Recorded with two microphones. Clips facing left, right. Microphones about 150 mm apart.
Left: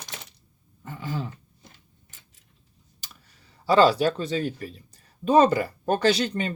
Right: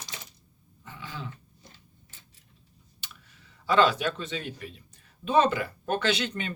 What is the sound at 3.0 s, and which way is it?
Speech, 40° left (ahead or behind).